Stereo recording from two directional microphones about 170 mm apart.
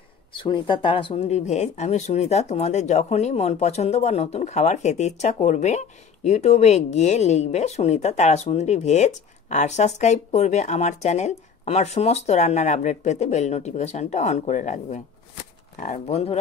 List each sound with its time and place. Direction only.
0.3 s speech: 30° left (ahead or behind)